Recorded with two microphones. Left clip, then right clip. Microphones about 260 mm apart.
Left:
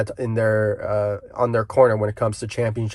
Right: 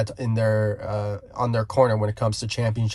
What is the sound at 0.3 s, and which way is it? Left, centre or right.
Speech, centre.